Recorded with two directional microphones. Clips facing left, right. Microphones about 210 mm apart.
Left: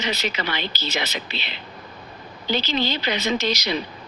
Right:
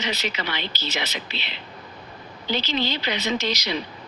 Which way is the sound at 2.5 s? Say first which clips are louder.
Left 2 dB; 40° left (ahead or behind).